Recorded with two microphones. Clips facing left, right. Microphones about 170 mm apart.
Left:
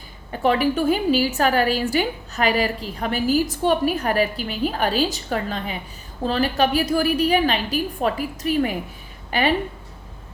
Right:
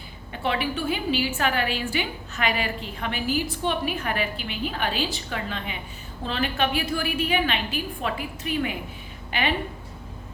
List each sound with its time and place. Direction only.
0.3 s a woman's voice: 40° left (ahead or behind)